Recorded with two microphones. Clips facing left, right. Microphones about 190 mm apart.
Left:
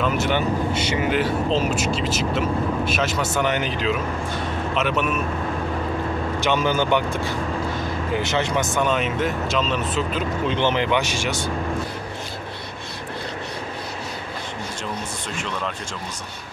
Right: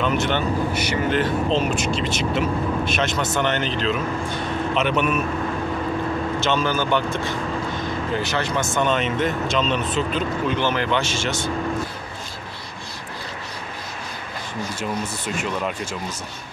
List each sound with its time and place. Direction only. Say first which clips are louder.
0.0 s speech: even; 5° left (ahead or behind)
6.4 s speech: left 2 dB; 15° left (ahead or behind)
10.4 s speech: left 3 dB; 20° left (ahead or behind)
14.8 s speech: right 3 dB; 10° right (ahead or behind)